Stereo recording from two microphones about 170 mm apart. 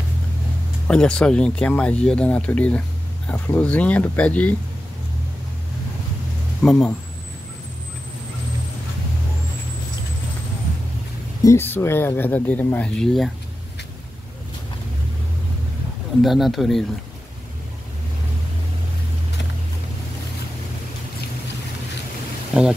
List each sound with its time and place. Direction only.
0.8 s speech: 5° left (ahead or behind)
6.6 s speech: 5° left (ahead or behind)
11.4 s speech: 15° left (ahead or behind)
16.2 s speech: centre (ahead or behind)
22.5 s speech: 5° right (ahead or behind)